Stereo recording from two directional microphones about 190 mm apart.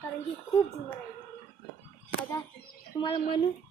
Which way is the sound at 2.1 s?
10° left (ahead or behind).